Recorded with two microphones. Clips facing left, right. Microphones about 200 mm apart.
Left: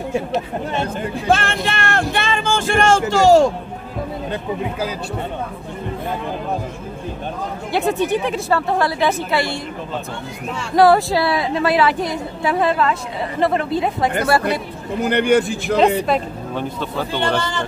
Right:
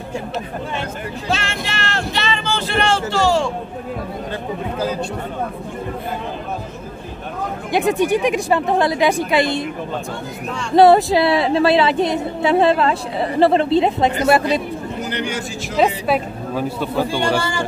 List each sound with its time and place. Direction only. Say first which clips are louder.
1.2 s a sound: left 6 dB; 55° left (ahead or behind)
7.7 s a woman's voice: right 2 dB; 15° right (ahead or behind)
10.8 s a woman's voice: right 2 dB; 20° right (ahead or behind)
15.0 s speech: left 13 dB; 55° left (ahead or behind)
16.1 s a woman's voice: right 1 dB; 5° right (ahead or behind)